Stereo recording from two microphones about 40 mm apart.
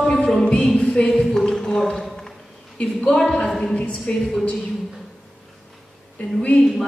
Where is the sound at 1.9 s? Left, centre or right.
Centre.